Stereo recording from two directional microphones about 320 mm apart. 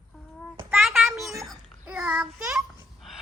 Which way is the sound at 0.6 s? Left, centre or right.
Centre.